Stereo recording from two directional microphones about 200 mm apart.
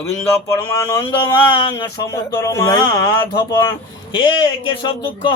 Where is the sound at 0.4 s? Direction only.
15° left (ahead or behind).